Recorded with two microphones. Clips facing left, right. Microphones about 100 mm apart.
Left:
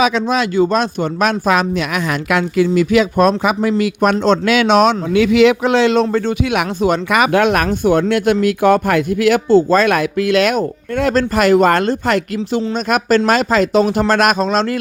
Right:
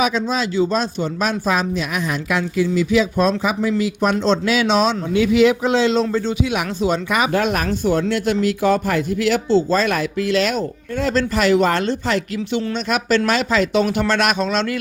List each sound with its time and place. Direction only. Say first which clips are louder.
0.0 s speech: left 4 dB; 70° left (ahead or behind); by 14.8 s 40° left (ahead or behind)